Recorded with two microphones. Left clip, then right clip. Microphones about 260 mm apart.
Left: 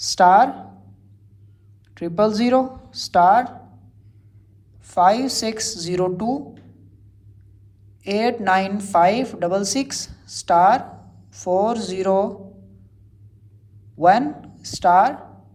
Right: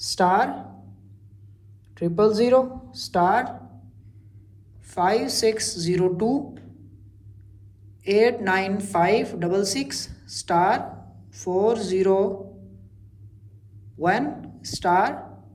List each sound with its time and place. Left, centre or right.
0.0 s speech: left
2.0 s a woman's voice: left
4.9 s a woman's voice: centre
8.0 s a woman's voice: centre
14.0 s a woman's voice: centre